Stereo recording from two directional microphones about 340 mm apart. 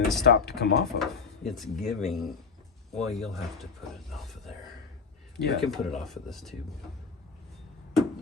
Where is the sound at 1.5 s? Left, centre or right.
Centre.